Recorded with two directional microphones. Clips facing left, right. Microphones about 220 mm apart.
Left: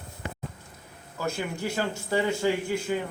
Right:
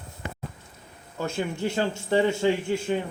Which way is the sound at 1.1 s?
25° right (ahead or behind).